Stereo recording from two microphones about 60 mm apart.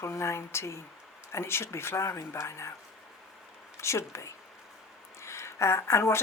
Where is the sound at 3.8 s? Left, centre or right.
Left.